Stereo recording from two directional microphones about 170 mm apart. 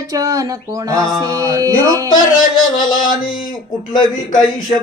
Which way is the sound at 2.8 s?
55° left (ahead or behind).